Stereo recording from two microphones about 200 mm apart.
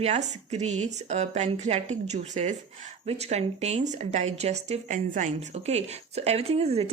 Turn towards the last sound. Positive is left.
turn(degrees=-30)  # may be behind; listen again after turning